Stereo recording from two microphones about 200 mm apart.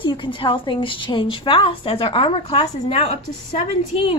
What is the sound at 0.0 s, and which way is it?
A woman's voice, 25° left (ahead or behind).